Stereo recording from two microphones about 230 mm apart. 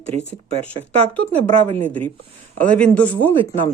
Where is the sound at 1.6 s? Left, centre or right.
Right.